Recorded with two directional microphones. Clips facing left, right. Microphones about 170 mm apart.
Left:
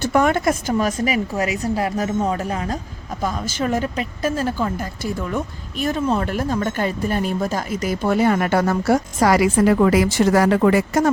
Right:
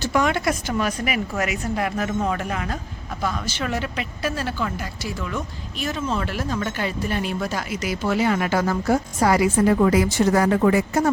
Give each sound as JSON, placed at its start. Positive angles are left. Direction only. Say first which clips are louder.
{"t": 0.0, "sound": "a woman's voice", "louder": "left 4 dB", "side_deg": 50}
{"t": 3.2, "sound": "a woman's voice", "louder": "left 4 dB", "side_deg": 45}